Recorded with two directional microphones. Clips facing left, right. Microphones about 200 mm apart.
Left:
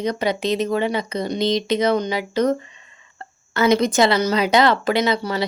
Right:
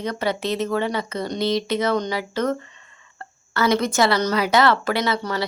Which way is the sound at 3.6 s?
20° left (ahead or behind).